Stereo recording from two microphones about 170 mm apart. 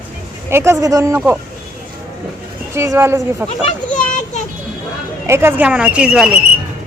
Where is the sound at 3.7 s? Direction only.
45° left (ahead or behind).